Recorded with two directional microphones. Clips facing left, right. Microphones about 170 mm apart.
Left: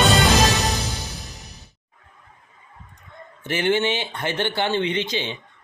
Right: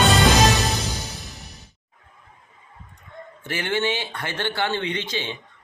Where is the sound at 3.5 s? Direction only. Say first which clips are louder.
Left 4 dB; 20° left (ahead or behind).